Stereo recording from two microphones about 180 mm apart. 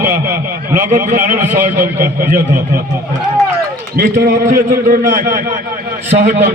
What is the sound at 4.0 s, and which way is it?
A man's voice, 50° right (ahead or behind).